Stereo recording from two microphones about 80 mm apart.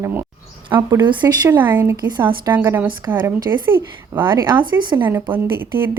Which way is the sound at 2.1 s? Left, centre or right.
Right.